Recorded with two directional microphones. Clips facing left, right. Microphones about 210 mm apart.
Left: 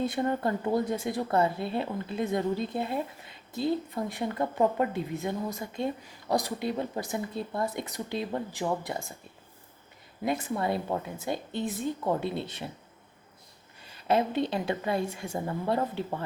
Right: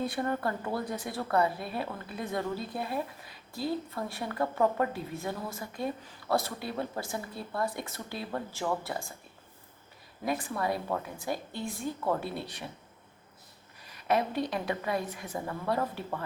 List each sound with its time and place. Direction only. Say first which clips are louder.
0.0 s speech: left 3 dB; 20° left (ahead or behind)
10.2 s speech: left 2 dB; 25° left (ahead or behind)
13.8 s speech: left 3 dB; 30° left (ahead or behind)